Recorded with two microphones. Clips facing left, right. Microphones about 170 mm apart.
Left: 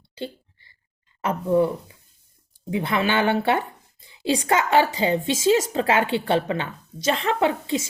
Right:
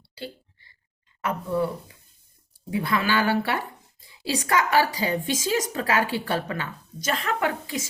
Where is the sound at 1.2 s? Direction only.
25° left (ahead or behind).